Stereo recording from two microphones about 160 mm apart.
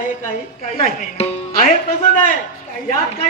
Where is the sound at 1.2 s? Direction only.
40° left (ahead or behind).